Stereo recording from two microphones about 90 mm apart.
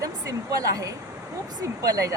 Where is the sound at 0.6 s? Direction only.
40° right (ahead or behind).